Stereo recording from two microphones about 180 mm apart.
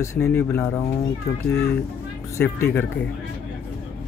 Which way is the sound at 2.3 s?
15° left (ahead or behind).